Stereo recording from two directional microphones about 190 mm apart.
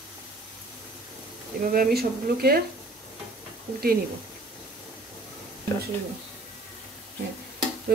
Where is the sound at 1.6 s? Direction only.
50° right (ahead or behind).